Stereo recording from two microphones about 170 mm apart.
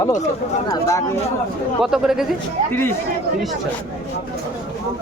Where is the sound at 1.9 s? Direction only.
5° right (ahead or behind).